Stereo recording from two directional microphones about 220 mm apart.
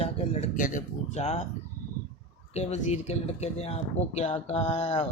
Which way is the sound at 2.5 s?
30° left (ahead or behind).